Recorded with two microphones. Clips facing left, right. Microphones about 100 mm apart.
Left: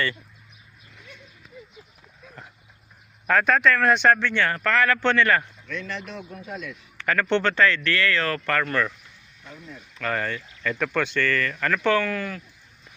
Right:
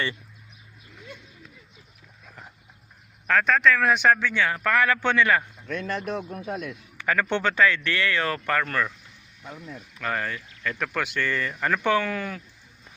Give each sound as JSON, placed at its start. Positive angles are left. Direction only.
{"t": 3.2, "sound": "speech", "side_deg": 0}
{"t": 5.6, "sound": "speech", "side_deg": -45}
{"t": 6.9, "sound": "speech", "side_deg": -10}
{"t": 9.9, "sound": "speech", "side_deg": -5}